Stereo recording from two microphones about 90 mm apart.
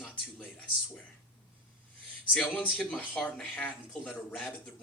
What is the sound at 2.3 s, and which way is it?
Speech, 5° left (ahead or behind).